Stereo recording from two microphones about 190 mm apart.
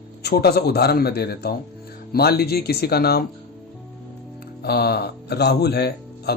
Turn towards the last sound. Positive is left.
turn(degrees=60)  # may be behind; listen again after turning